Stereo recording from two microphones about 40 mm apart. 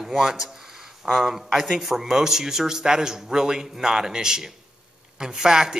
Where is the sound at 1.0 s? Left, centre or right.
Centre.